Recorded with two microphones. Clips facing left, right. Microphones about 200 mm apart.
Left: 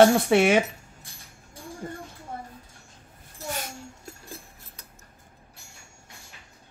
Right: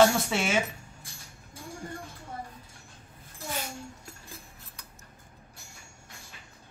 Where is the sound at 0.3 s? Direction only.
60° left (ahead or behind).